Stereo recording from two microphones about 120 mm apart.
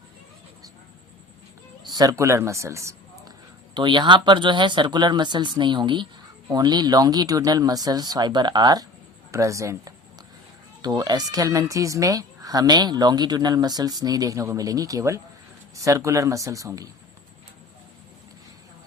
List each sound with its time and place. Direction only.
1.9 s a man's voice: 30° right (ahead or behind)
3.8 s a woman's voice: 40° right (ahead or behind)